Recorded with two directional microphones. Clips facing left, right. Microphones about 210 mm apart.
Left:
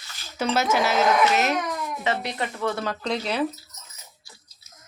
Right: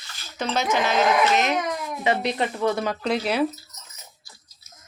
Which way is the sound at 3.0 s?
5° right (ahead or behind).